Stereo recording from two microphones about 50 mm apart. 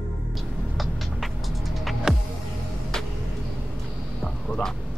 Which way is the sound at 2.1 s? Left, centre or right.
Centre.